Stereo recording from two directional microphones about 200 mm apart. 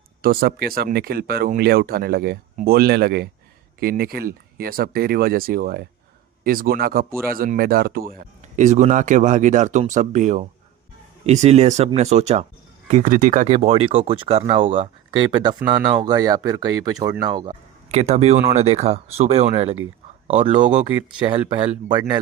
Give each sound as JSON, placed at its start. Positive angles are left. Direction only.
{"t": 0.2, "sound": "speech", "side_deg": -45}
{"t": 21.2, "sound": "speech", "side_deg": -25}